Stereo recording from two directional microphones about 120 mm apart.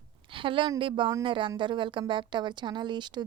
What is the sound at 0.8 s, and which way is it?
A woman's voice, 45° right (ahead or behind).